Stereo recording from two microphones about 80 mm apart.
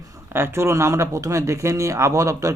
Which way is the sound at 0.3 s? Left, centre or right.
Right.